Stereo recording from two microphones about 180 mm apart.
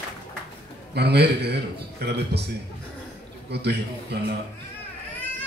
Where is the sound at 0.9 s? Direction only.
65° right (ahead or behind).